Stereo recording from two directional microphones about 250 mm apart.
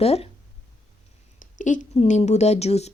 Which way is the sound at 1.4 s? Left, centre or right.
Left.